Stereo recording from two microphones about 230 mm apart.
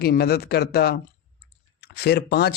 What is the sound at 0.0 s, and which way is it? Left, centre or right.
Speech, left.